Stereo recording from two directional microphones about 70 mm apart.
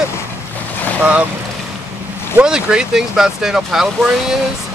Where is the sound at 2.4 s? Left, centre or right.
Centre.